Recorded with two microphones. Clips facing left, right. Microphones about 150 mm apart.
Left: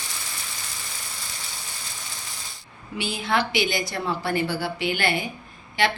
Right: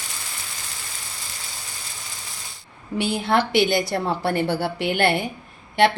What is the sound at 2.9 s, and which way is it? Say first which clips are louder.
A woman's voice: right 4 dB; 60° right (ahead or behind).